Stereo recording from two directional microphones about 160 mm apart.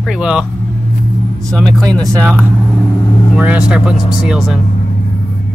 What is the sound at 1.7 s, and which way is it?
Speech, 25° right (ahead or behind).